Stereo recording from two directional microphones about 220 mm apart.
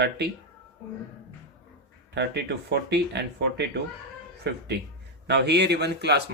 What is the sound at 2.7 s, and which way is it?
Speech, 50° right (ahead or behind).